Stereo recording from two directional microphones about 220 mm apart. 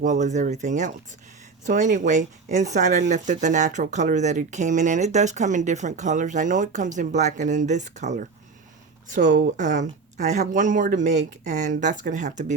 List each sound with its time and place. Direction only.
0.0 s speech: 35° right (ahead or behind)